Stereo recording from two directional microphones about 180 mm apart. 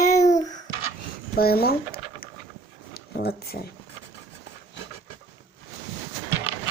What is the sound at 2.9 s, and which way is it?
Speech, 60° left (ahead or behind).